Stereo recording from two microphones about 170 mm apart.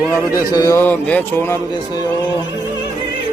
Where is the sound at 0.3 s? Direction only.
20° left (ahead or behind).